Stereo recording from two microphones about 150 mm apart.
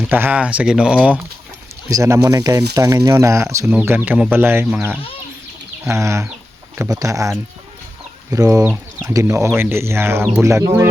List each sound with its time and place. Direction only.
0.1 s speech: 10° right (ahead or behind)
1.9 s speech: 20° right (ahead or behind)
8.6 s speech: 10° right (ahead or behind)